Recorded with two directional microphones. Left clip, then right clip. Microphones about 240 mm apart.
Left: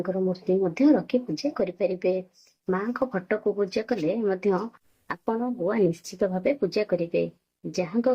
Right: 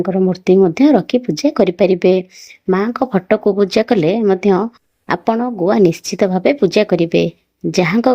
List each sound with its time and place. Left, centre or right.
0.0 s speech: right